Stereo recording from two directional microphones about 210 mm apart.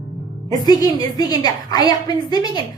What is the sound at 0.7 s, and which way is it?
A woman's voice, 20° left (ahead or behind).